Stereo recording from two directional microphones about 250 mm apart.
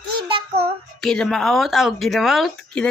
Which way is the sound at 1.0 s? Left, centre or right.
Centre.